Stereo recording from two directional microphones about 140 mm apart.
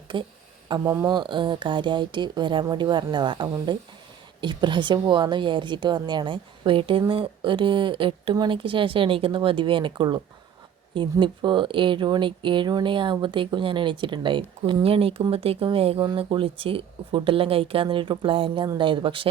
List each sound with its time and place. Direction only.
0.1 s speech: 35° right (ahead or behind)